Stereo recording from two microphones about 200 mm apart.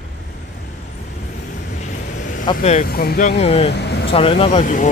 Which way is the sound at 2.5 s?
35° left (ahead or behind).